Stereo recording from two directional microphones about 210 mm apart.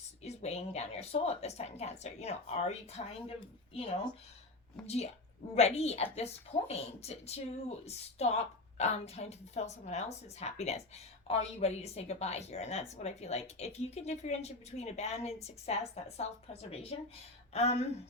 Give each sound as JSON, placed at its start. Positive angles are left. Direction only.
{"t": 0.2, "sound": "speech", "side_deg": 30}
{"t": 4.8, "sound": "speech", "side_deg": 0}
{"t": 5.5, "sound": "a woman's voice", "side_deg": 30}